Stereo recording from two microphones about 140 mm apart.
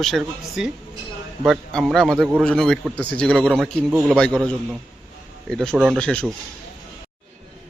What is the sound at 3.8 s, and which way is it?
Speech, 15° right (ahead or behind).